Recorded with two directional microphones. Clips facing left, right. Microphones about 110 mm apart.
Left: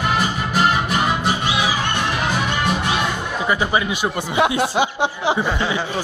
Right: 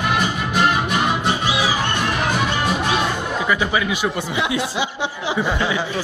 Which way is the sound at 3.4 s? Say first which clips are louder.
Left 2 dB; 30° left (ahead or behind).